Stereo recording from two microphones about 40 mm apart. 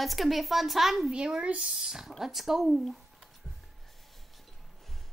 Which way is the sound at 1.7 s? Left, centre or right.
Centre.